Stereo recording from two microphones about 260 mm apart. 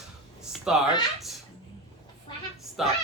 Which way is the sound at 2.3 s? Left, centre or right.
Centre.